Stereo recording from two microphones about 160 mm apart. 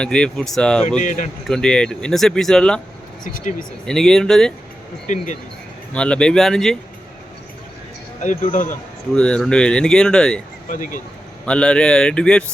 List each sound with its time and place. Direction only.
0.0 s speech: 5° left (ahead or behind)
0.9 s speech: 50° left (ahead or behind)
1.5 s speech: 5° left (ahead or behind)
3.2 s speech: 55° left (ahead or behind)
3.8 s speech: 5° left (ahead or behind)
5.0 s speech: 50° left (ahead or behind)
5.9 s speech: 5° left (ahead or behind)
9.1 s speech: 5° left (ahead or behind)
10.7 s speech: 55° left (ahead or behind)
11.4 s speech: 5° left (ahead or behind)